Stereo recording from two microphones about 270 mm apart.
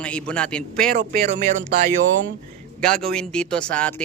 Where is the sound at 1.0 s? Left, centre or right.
Right.